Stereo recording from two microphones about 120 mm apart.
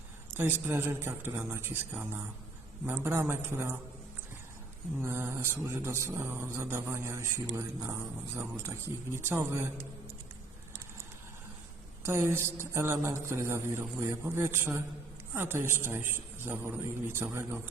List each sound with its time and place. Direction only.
0.3 s mantra: 20° right (ahead or behind)
4.9 s mantra: 20° right (ahead or behind)
9.1 s mantra: 20° right (ahead or behind)
12.0 s mantra: 20° right (ahead or behind)